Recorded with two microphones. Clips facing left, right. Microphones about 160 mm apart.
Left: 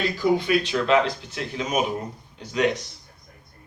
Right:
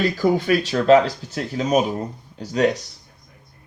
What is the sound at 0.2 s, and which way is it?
Speech, 45° right (ahead or behind).